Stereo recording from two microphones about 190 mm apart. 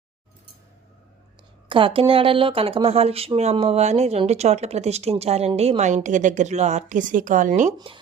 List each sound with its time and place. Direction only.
1.7 s speech: 30° right (ahead or behind)